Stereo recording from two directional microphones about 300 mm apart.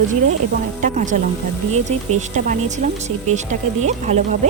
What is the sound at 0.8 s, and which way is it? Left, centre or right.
Speech, right.